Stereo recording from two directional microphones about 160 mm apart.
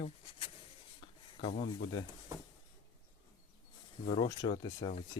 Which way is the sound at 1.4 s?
40° left (ahead or behind).